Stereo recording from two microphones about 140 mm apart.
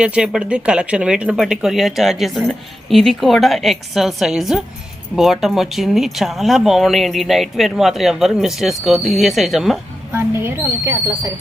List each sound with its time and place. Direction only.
0.0 s speech: 5° right (ahead or behind)
10.1 s speech: 15° right (ahead or behind)